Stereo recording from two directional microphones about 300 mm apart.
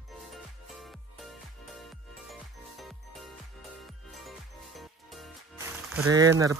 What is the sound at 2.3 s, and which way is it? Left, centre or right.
Music, centre.